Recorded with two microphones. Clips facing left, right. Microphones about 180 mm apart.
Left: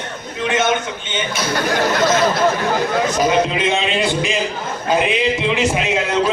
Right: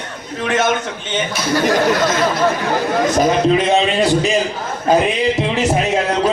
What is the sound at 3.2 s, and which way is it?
A man's voice, 40° right (ahead or behind).